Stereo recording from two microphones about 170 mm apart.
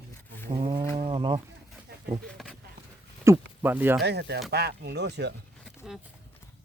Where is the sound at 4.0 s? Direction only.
75° right (ahead or behind).